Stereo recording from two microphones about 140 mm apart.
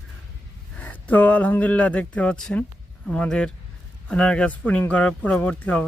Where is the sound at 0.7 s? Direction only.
10° left (ahead or behind).